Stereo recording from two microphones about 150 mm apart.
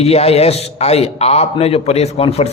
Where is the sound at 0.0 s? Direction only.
45° left (ahead or behind).